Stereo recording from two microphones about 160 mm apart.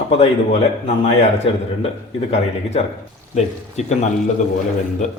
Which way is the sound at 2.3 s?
40° left (ahead or behind).